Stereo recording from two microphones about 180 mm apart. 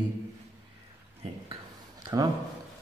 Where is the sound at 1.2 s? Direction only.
30° right (ahead or behind).